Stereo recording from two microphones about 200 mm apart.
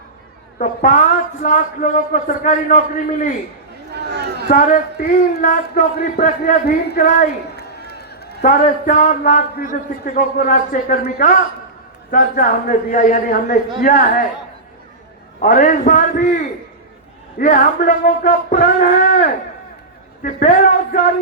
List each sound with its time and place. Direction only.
0.6 s a man's voice: 40° left (ahead or behind)
3.9 s a sound: 55° right (ahead or behind)
4.4 s a man's voice: 40° left (ahead or behind)
8.4 s a man's voice: 40° left (ahead or behind)
15.4 s a man's voice: 40° left (ahead or behind)
17.4 s a man's voice: 40° left (ahead or behind)